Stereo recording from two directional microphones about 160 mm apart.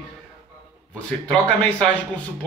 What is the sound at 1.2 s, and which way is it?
Speech, 5° left (ahead or behind).